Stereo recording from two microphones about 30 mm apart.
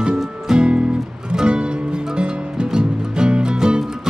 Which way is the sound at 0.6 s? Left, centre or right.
Right.